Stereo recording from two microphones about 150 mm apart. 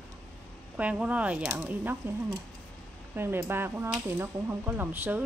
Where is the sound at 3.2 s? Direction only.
15° right (ahead or behind).